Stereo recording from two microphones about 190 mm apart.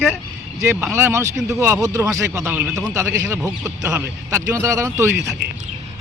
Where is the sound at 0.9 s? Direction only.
10° right (ahead or behind).